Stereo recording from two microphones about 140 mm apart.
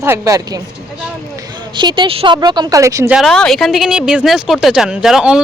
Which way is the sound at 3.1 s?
Centre (ahead or behind).